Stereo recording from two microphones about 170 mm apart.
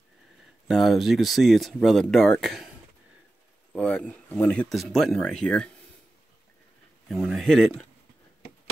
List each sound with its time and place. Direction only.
0.7 s speech: centre (ahead or behind)
3.7 s a sound: 5° left (ahead or behind)
4.3 s speech: 10° left (ahead or behind)
7.1 s speech: centre (ahead or behind)